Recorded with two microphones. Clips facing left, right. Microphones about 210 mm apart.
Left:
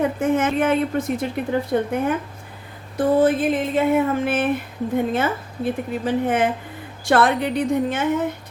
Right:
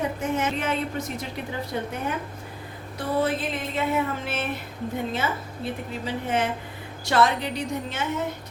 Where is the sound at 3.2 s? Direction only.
50° left (ahead or behind).